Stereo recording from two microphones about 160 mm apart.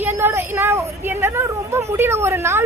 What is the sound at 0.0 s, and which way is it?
A woman's voice, 15° right (ahead or behind).